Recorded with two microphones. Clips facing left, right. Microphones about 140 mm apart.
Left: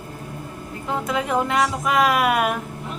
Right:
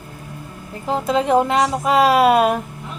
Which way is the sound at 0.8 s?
25° right (ahead or behind).